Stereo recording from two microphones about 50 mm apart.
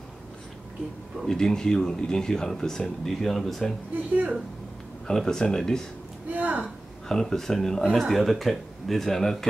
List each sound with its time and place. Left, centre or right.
1.2 s speech: centre
3.9 s speech: right
5.0 s speech: centre
6.3 s speech: right
7.1 s speech: centre